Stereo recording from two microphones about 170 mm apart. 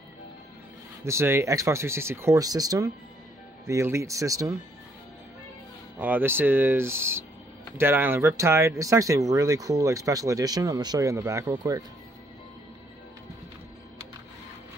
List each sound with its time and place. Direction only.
1.0 s speech: 15° right (ahead or behind)
5.9 s speech: 10° right (ahead or behind)